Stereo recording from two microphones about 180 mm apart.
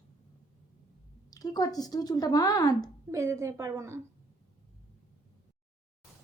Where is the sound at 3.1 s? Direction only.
15° right (ahead or behind).